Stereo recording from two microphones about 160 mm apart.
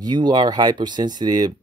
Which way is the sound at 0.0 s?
25° right (ahead or behind).